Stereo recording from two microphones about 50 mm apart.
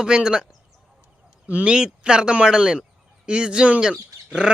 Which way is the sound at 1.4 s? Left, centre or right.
Right.